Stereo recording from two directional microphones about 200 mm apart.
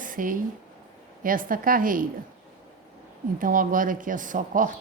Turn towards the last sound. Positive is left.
turn(degrees=-40)  # may be behind; listen again after turning